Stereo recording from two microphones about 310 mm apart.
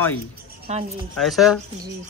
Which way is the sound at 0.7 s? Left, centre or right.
Right.